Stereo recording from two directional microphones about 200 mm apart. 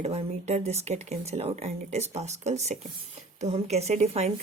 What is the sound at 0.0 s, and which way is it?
Speech, 30° right (ahead or behind).